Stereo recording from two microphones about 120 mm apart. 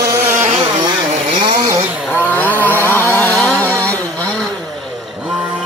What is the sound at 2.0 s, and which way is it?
Vehicle, 15° left (ahead or behind).